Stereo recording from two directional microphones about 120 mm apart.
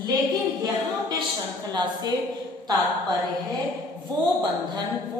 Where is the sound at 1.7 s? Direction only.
35° right (ahead or behind).